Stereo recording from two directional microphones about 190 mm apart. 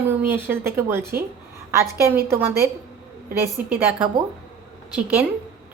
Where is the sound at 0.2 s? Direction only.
10° right (ahead or behind).